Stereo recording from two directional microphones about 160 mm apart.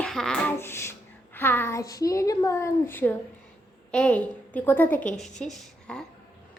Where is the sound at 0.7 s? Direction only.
15° left (ahead or behind).